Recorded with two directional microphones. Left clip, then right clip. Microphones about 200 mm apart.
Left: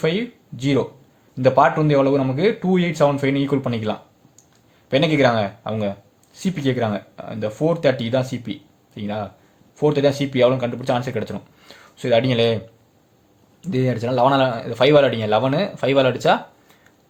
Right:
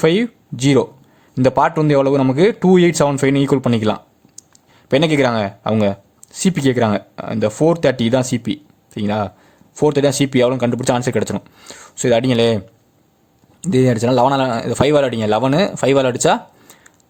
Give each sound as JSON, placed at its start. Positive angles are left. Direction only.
{"t": 0.0, "sound": "speech", "side_deg": -45}